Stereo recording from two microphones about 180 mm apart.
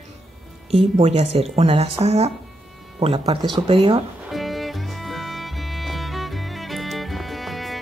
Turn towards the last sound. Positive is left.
turn(degrees=0)  # may be behind; listen again after turning